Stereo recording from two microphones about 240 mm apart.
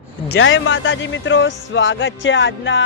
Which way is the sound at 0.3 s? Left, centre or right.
Left.